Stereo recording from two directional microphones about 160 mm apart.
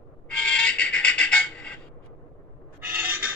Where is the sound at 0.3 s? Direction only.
5° left (ahead or behind).